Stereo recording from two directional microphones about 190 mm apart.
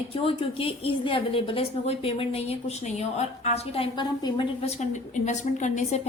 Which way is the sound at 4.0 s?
25° left (ahead or behind).